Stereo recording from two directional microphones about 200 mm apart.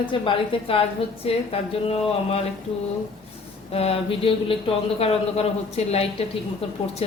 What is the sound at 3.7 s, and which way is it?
A woman's voice, 30° left (ahead or behind).